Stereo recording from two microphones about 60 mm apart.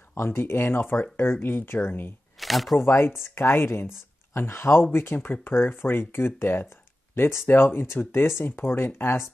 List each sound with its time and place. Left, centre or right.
0.1 s speech: left
2.4 s speech: centre
2.8 s speech: left